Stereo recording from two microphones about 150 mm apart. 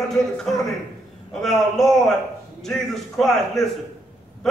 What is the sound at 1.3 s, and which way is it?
A man's voice, 5° left (ahead or behind).